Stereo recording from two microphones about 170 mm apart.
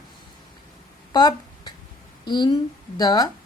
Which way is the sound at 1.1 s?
25° left (ahead or behind).